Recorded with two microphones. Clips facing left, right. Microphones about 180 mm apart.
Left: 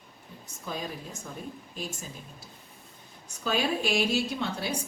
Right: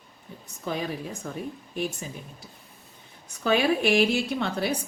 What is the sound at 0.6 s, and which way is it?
A woman's voice, 65° right (ahead or behind).